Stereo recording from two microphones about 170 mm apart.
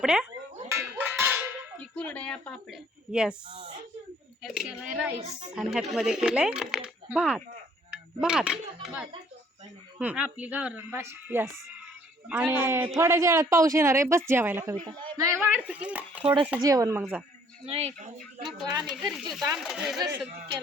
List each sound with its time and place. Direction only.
0.0 s speech: 5° right (ahead or behind)
0.7 s a sound: 15° right (ahead or behind)
1.8 s speech: 5° left (ahead or behind)
3.1 s a woman's voice: 5° right (ahead or behind)
4.4 s a woman's voice: 5° right (ahead or behind)
16.6 s speech: 20° right (ahead or behind)
17.7 s speech: 40° right (ahead or behind)
18.4 s speech: 25° right (ahead or behind)
18.9 s a woman's voice: centre (ahead or behind)